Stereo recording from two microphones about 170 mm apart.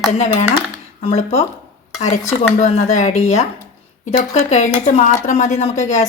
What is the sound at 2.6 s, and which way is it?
Speech, 40° left (ahead or behind).